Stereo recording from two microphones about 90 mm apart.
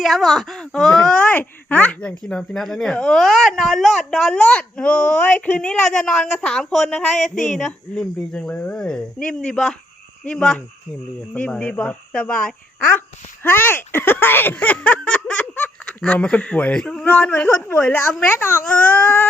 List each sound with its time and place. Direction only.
0.0 s a woman's voice: centre (ahead or behind); by 19.3 s 20° left (ahead or behind)